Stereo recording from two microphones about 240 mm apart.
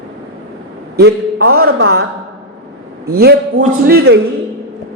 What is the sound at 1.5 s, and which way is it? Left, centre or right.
Speech, right.